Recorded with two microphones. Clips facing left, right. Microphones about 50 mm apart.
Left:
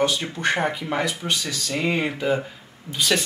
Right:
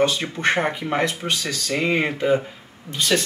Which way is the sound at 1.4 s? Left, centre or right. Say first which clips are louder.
Right 2 dB; right.